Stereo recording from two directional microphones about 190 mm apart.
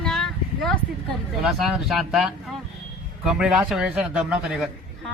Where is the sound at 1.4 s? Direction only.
Centre (ahead or behind).